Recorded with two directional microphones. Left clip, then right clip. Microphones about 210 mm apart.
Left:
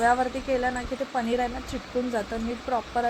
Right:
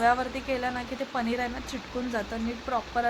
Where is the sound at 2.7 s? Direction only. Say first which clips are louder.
Left 2 dB; 10° left (ahead or behind).